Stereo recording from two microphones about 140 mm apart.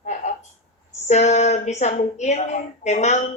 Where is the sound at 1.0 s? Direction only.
55° left (ahead or behind).